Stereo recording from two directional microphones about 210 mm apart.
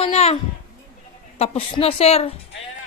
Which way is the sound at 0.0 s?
30° left (ahead or behind).